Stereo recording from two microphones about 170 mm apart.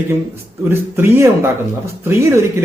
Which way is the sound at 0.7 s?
15° right (ahead or behind).